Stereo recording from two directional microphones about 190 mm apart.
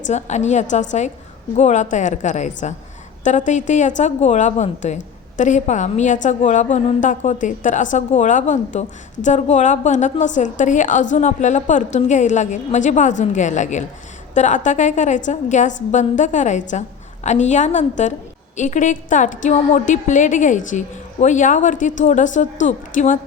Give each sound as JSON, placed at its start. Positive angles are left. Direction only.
{"t": 0.1, "sound": "a woman's voice", "side_deg": 35}